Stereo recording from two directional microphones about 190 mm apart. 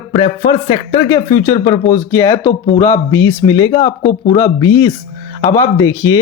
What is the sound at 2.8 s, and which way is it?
Speech, 15° left (ahead or behind).